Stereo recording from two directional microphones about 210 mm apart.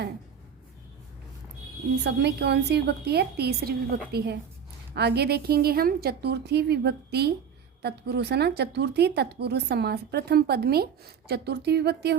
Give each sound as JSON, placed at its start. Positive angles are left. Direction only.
{"t": 2.0, "sound": "a woman's voice", "side_deg": -55}